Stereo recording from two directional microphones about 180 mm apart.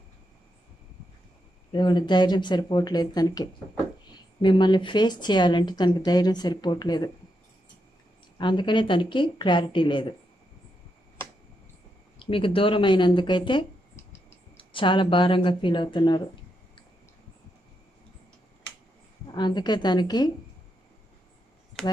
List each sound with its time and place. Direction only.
1.7 s speech: 25° left (ahead or behind)
8.4 s speech: 25° left (ahead or behind)
12.2 s speech: 30° left (ahead or behind)
19.3 s speech: 25° left (ahead or behind)